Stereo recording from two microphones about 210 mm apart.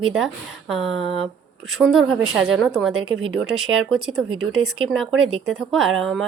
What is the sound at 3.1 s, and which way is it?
Speech, 70° right (ahead or behind).